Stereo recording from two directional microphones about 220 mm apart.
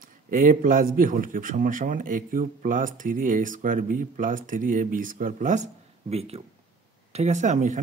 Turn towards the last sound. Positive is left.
turn(degrees=-35)  # may be behind; listen again after turning